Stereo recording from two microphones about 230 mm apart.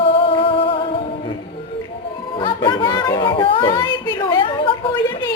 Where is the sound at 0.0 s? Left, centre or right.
Left.